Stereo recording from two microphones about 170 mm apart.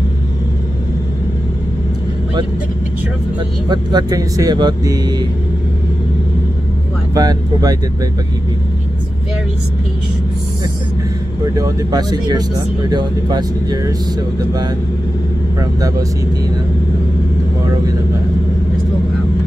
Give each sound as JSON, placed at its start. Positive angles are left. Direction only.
{"t": 3.6, "sound": "speech", "side_deg": -25}
{"t": 7.2, "sound": "speech", "side_deg": -20}
{"t": 11.5, "sound": "speech", "side_deg": -25}